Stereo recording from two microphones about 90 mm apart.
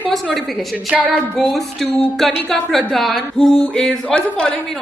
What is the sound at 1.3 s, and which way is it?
A woman's voice, centre (ahead or behind).